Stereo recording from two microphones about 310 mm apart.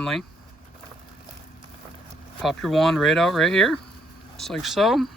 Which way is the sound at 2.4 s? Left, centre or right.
Centre.